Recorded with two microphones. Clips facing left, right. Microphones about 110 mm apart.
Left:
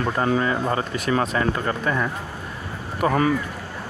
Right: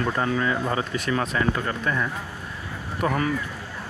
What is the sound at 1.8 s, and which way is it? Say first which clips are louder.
Speech: left 2 dB; 15° left (ahead or behind).